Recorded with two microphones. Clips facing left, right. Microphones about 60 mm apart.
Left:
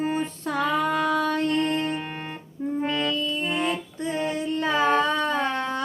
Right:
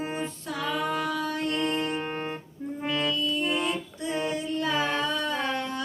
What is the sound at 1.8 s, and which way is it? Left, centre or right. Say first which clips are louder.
Music: left 2 dB; centre.